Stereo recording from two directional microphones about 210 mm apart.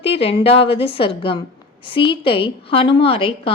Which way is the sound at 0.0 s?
25° left (ahead or behind).